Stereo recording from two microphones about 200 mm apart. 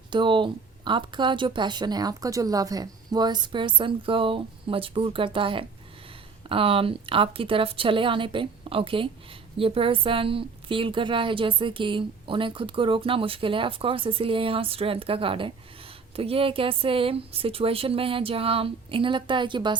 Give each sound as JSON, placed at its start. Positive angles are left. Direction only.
{"t": 0.1, "sound": "speech", "side_deg": -25}